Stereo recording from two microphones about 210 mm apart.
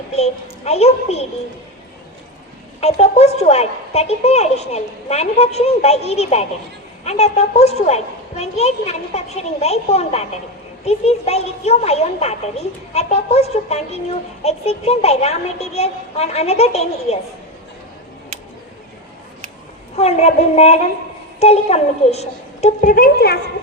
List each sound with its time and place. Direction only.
0.2 s speech: 30° left (ahead or behind)
2.8 s speech: 30° left (ahead or behind)
20.0 s speech: 30° left (ahead or behind)